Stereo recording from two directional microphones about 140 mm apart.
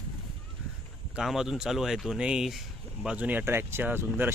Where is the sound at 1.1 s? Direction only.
5° right (ahead or behind).